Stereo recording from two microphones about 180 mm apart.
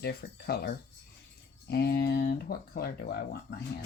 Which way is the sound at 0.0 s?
60° left (ahead or behind).